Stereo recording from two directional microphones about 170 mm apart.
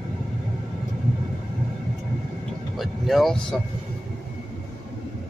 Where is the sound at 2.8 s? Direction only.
Centre (ahead or behind).